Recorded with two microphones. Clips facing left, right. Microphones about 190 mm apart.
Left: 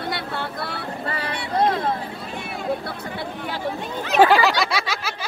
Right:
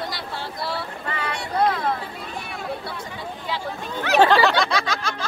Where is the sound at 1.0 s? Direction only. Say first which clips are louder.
Left 1 dB; 35° left (ahead or behind).